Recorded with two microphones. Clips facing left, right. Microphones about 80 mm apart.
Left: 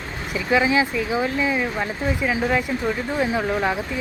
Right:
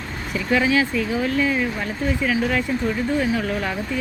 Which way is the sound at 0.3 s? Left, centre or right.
Centre.